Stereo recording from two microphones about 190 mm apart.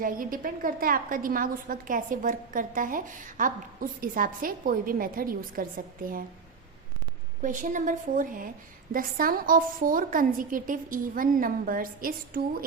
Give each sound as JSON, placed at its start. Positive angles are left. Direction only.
{"t": 0.0, "sound": "a woman's voice", "side_deg": -45}
{"t": 7.4, "sound": "a woman's voice", "side_deg": -45}